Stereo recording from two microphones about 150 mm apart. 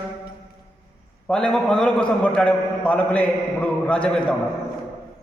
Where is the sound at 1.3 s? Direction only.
5° left (ahead or behind).